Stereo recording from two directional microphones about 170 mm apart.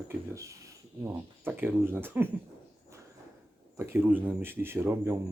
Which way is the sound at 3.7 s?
15° right (ahead or behind).